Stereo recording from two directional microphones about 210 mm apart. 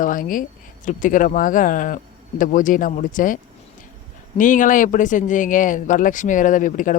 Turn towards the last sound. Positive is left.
turn(degrees=40)  # may be behind; listen again after turning